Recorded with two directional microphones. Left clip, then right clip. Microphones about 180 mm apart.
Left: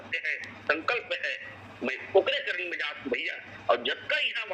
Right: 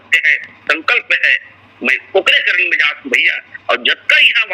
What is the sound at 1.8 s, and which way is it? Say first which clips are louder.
A man's voice: right 12 dB; 50° right (ahead or behind).